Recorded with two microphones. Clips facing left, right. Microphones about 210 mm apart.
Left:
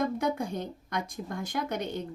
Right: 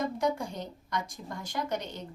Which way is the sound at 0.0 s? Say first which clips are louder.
Left 1 dB; 55° left (ahead or behind).